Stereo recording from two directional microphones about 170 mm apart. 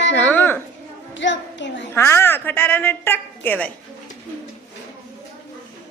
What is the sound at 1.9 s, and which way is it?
A woman's voice, 15° left (ahead or behind).